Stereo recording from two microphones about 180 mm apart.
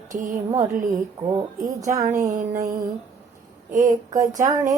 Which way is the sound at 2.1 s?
15° right (ahead or behind).